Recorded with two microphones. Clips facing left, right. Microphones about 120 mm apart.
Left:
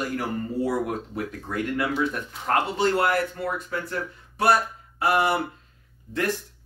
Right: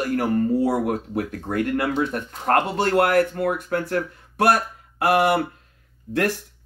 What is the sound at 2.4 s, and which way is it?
Speech, 55° right (ahead or behind).